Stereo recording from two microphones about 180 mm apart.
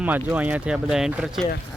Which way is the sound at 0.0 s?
10° right (ahead or behind).